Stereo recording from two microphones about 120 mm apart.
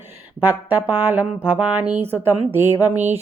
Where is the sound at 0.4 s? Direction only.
15° right (ahead or behind).